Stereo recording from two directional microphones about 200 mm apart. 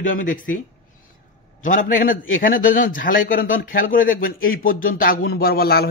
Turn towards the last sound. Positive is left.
turn(degrees=50)  # may be behind; listen again after turning